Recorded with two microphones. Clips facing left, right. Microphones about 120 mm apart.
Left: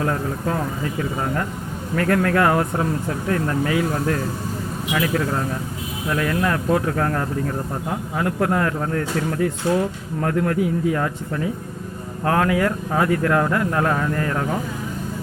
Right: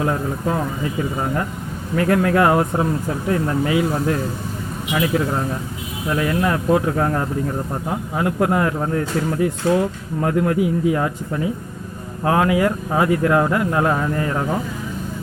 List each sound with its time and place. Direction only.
0.0 s speech: 15° right (ahead or behind)